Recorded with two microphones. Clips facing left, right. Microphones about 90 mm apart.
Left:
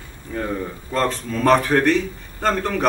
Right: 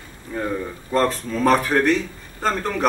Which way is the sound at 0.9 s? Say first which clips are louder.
Right 2 dB; 5° right (ahead or behind).